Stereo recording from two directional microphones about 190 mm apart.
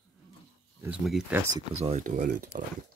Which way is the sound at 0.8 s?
5° right (ahead or behind).